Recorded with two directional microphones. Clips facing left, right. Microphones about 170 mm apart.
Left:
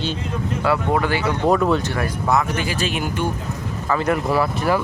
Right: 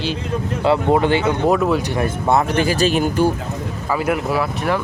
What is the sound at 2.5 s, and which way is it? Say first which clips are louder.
Speech: right 7 dB; 40° right (ahead or behind).